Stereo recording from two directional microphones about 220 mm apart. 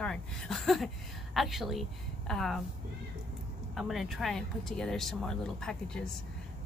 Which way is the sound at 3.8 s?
Centre (ahead or behind).